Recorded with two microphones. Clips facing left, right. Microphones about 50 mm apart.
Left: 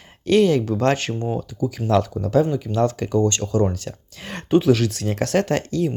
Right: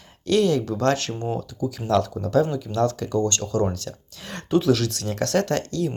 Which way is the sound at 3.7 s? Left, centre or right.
Left.